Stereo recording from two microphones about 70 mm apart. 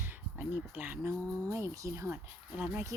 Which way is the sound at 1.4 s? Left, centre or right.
Right.